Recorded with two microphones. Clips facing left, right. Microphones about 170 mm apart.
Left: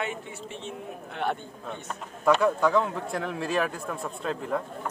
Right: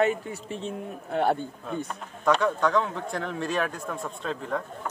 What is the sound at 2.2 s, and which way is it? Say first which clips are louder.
A man's voice: left 1 dB; 5° left (ahead or behind).